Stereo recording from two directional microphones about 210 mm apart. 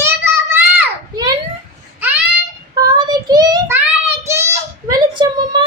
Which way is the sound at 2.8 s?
20° right (ahead or behind).